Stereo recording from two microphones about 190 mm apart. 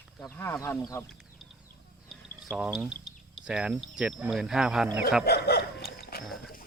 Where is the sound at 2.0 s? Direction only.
Centre (ahead or behind).